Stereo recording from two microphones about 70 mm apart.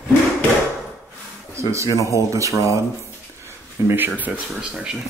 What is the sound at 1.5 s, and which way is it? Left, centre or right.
Speech, right.